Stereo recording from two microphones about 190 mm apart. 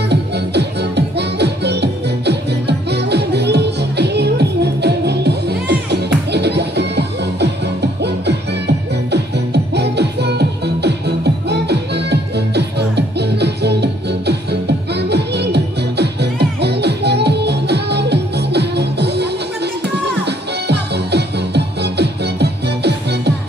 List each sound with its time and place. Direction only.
0.1 s music: 60° right (ahead or behind)
20.2 s music: 60° right (ahead or behind)